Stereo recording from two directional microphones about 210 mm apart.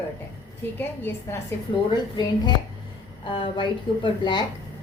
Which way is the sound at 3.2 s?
20° left (ahead or behind).